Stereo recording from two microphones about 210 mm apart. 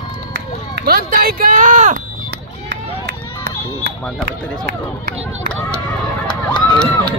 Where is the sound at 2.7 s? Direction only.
50° right (ahead or behind).